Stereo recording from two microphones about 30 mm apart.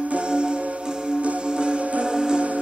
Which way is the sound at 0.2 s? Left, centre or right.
Right.